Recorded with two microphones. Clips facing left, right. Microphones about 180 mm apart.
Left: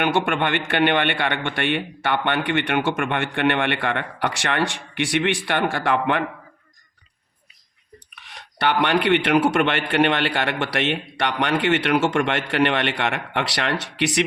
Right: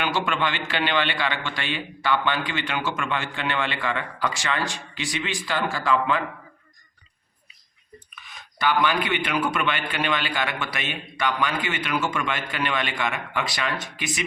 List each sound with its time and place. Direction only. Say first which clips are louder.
0.0 s a man's voice: left 4 dB; 60° left (ahead or behind)
8.4 s a man's voice: left 2 dB; 70° left (ahead or behind)